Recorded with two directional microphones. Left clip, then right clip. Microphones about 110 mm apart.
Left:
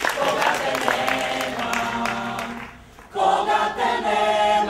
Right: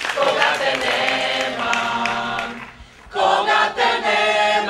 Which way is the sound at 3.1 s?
25° right (ahead or behind).